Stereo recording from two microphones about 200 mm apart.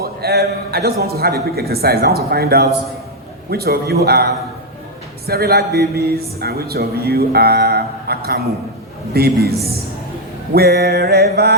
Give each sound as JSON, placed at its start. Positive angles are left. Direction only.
{"t": 0.0, "sound": "a man's voice", "side_deg": -50}